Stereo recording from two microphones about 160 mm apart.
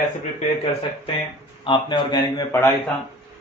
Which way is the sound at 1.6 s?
30° left (ahead or behind).